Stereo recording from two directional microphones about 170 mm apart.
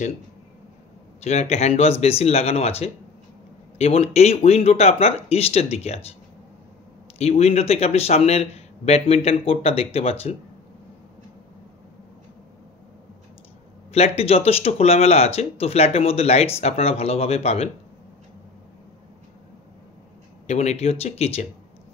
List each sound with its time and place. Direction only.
1.2 s speech: 40° left (ahead or behind)
7.2 s speech: 35° left (ahead or behind)
13.9 s speech: 35° left (ahead or behind)
20.4 s speech: 40° left (ahead or behind)